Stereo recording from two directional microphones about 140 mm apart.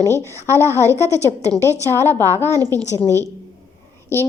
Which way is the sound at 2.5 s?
25° right (ahead or behind).